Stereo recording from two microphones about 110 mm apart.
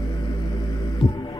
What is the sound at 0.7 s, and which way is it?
Hum, 45° left (ahead or behind).